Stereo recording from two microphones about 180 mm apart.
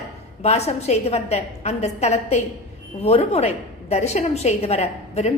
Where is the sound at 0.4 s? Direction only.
35° left (ahead or behind).